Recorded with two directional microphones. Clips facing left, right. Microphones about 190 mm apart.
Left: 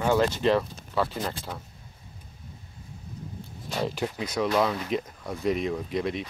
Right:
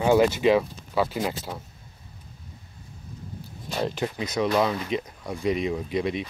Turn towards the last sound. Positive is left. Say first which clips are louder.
# right 2 dB
turn(degrees=0)  # may be behind; listen again after turning